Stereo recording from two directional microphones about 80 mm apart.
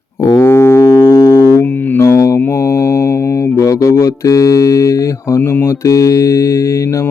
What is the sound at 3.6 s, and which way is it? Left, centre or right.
Mantra, left.